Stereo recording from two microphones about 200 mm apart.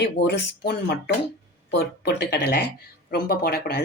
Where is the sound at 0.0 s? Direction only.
55° left (ahead or behind).